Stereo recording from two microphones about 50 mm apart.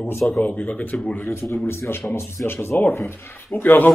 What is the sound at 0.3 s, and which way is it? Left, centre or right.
Speech, left.